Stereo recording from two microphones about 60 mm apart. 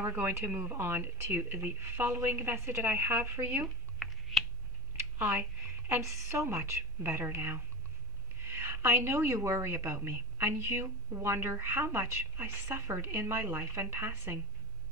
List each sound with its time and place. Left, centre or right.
0.0 s a woman's voice: right
3.6 s a sound: centre
6.0 s a woman's voice: right